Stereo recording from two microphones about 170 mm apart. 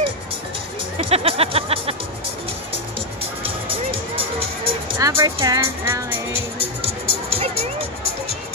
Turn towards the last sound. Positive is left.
turn(degrees=-35)  # may be behind; listen again after turning